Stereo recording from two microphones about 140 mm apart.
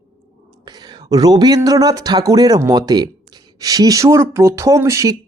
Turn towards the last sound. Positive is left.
turn(degrees=-20)  # may be behind; listen again after turning